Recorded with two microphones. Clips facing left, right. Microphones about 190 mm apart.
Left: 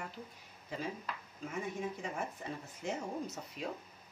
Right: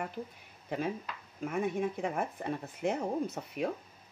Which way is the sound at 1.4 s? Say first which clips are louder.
Right 8 dB; 60° right (ahead or behind).